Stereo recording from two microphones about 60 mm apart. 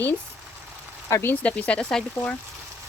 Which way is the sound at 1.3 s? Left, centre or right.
Left.